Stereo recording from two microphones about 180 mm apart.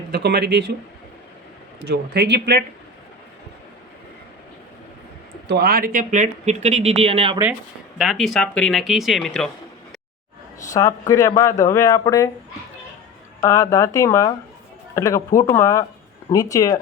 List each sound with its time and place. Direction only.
0.1 s speech: 65° right (ahead or behind)
1.8 s speech: 65° right (ahead or behind)
5.5 s speech: 60° right (ahead or behind); by 7.3 s 35° right (ahead or behind)
7.9 s speech: centre (ahead or behind)
10.7 s speech: 20° left (ahead or behind)
13.4 s speech: 15° left (ahead or behind)
15.3 s speech: 50° left (ahead or behind)
15.5 s speech: 15° left (ahead or behind)